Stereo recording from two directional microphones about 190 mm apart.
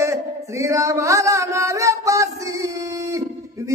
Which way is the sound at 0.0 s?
15° right (ahead or behind).